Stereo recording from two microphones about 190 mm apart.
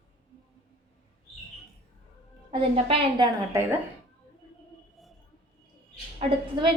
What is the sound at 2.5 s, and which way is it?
A woman's voice, 30° right (ahead or behind).